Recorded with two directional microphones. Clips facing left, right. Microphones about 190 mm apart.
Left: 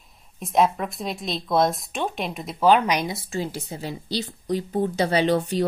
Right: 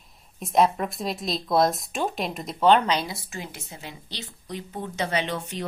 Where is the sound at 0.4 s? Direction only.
Centre (ahead or behind).